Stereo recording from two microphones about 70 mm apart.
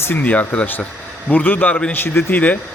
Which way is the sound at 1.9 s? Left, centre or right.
Left.